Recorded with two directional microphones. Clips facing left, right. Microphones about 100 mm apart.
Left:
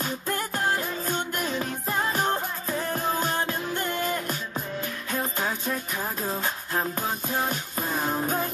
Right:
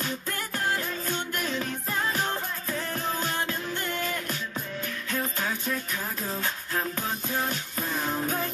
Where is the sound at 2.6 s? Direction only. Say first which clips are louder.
Left 4 dB; 15° left (ahead or behind).